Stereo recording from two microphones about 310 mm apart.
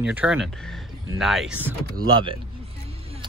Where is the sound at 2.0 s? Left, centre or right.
Centre.